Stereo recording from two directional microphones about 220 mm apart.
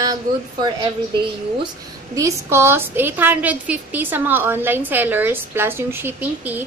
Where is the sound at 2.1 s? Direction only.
15° right (ahead or behind).